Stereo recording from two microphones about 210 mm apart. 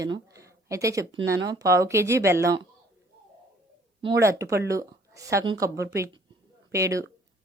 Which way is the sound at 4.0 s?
15° right (ahead or behind).